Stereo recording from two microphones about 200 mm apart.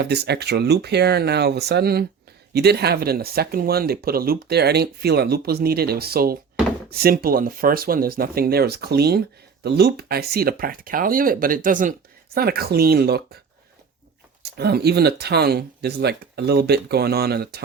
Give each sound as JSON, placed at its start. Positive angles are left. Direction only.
{"t": 0.0, "sound": "speech", "side_deg": -55}
{"t": 14.4, "sound": "speech", "side_deg": -55}